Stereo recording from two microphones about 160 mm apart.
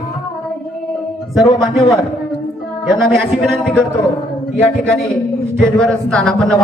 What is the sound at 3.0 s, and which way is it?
Speech, centre (ahead or behind).